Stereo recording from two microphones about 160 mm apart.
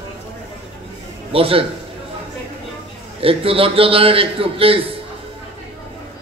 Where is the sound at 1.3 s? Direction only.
35° right (ahead or behind).